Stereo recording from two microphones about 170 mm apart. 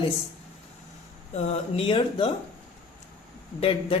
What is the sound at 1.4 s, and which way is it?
Speech, 35° left (ahead or behind).